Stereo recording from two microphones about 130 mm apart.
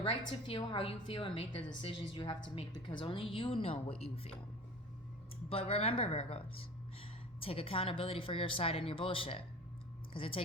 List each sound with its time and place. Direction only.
0.4 s a woman's voice: 45° left (ahead or behind)
5.5 s a woman's voice: 45° left (ahead or behind)